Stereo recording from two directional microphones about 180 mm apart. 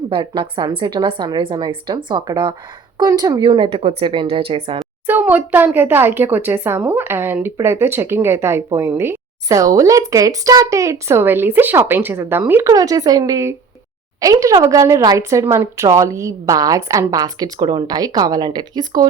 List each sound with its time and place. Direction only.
0.1 s a woman's voice: 25° right (ahead or behind)
5.0 s a woman's voice: 10° right (ahead or behind)